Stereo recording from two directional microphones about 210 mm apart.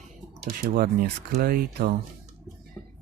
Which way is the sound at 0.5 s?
45° right (ahead or behind).